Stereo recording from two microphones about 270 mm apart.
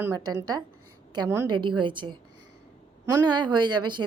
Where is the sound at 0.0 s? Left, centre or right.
Centre.